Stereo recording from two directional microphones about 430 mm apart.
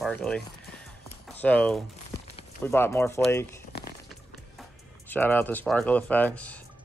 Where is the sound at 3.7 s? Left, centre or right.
Left.